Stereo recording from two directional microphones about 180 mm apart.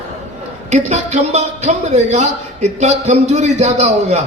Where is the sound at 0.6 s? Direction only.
40° right (ahead or behind).